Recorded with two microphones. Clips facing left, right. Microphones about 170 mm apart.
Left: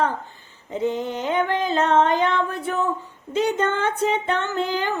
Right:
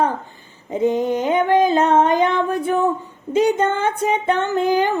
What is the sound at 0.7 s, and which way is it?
Female singing, 15° right (ahead or behind).